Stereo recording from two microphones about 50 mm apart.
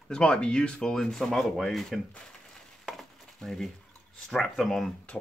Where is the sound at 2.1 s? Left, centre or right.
Centre.